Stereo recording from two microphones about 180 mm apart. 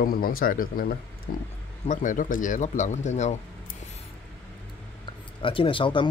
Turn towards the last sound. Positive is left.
turn(degrees=30)  # may be behind; listen again after turning